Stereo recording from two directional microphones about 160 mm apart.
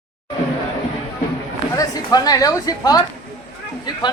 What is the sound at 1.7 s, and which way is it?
A man's voice, 25° left (ahead or behind).